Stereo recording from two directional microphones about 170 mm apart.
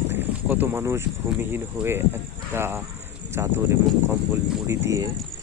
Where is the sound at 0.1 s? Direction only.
10° right (ahead or behind).